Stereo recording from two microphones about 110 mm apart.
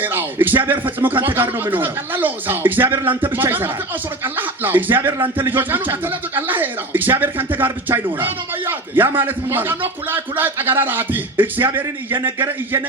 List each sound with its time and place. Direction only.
0.0 s speech: 20° right (ahead or behind)